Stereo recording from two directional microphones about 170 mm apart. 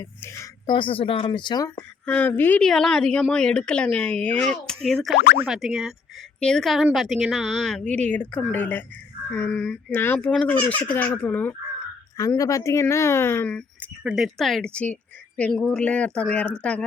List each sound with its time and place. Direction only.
0.7 s speech: 30° left (ahead or behind)
2.0 s a woman's voice: 10° left (ahead or behind)
14.0 s a woman's voice: 5° right (ahead or behind)